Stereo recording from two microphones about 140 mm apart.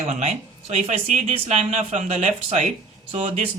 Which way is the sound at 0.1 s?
60° right (ahead or behind).